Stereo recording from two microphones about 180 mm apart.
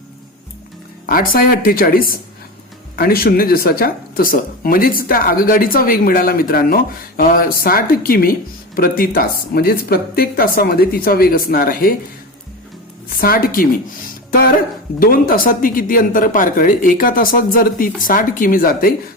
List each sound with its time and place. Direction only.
1.0 s speech: 50° left (ahead or behind)
13.1 s speech: 55° left (ahead or behind)
14.9 s speech: 55° left (ahead or behind)